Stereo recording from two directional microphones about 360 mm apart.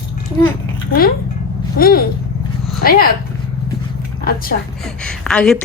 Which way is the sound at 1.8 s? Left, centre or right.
Left.